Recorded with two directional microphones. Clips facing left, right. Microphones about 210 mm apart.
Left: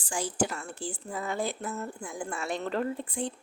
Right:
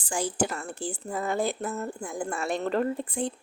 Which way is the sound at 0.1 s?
50° right (ahead or behind).